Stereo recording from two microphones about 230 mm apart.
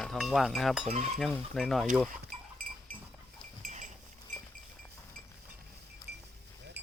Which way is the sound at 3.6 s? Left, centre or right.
Right.